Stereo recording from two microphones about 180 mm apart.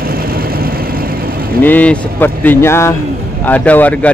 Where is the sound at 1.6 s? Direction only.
10° left (ahead or behind).